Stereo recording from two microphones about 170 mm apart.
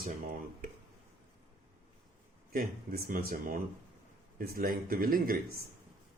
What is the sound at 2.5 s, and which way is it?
Speech, 60° right (ahead or behind).